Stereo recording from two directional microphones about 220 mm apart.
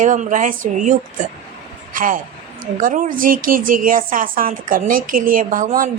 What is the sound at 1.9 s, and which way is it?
A man's voice, 40° right (ahead or behind).